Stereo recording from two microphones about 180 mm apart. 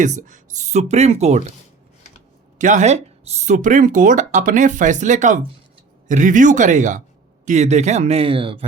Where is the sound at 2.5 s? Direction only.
45° right (ahead or behind).